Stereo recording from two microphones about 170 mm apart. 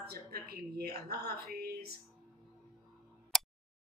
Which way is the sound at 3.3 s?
Centre (ahead or behind).